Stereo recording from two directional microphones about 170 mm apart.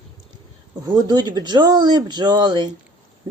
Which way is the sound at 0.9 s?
25° right (ahead or behind).